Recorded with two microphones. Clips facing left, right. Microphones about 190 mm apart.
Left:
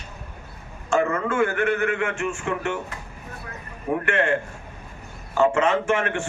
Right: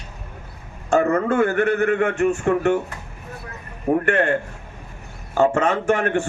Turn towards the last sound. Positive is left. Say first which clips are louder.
# right 4 dB
turn(degrees=-40)  # may be behind; listen again after turning